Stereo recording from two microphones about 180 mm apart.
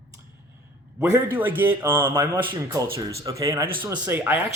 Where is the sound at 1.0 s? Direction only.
10° right (ahead or behind).